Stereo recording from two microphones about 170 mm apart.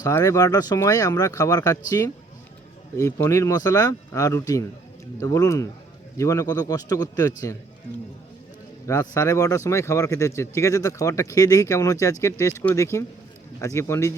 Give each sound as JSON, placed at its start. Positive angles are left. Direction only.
{"t": 0.0, "sound": "speech", "side_deg": 20}
{"t": 8.9, "sound": "speech", "side_deg": 15}